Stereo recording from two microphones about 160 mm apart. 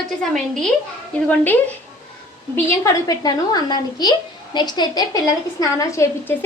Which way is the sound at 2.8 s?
20° left (ahead or behind).